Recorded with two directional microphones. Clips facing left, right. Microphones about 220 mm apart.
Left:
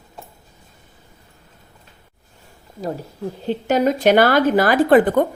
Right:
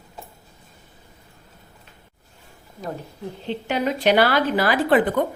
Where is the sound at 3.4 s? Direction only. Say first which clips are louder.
Left 6 dB; 45° left (ahead or behind).